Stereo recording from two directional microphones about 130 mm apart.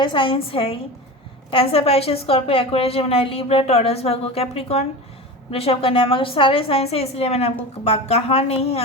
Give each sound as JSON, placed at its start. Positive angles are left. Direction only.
{"t": 0.0, "sound": "a woman's voice", "side_deg": 40}